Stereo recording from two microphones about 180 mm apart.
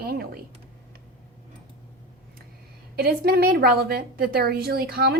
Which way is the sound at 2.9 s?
60° right (ahead or behind).